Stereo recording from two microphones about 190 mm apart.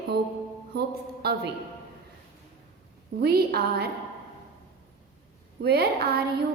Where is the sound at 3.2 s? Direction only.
55° right (ahead or behind).